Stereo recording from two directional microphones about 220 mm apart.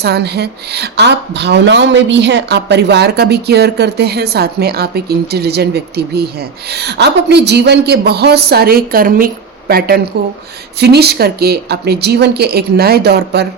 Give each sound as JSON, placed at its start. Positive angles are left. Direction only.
{"t": 0.0, "sound": "a woman's voice", "side_deg": -50}